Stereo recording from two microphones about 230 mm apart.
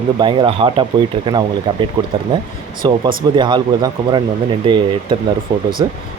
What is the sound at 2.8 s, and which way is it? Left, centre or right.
Speech, centre.